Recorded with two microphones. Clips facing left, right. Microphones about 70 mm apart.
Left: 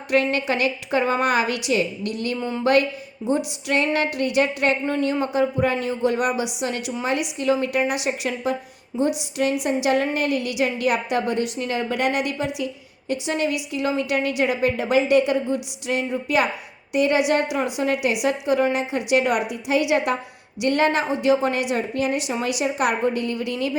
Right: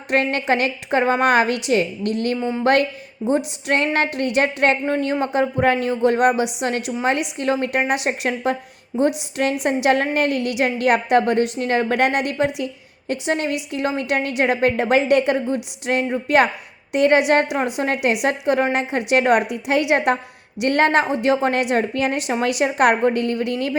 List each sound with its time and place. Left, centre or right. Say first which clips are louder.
0.1 s a woman's voice: right 2 dB; right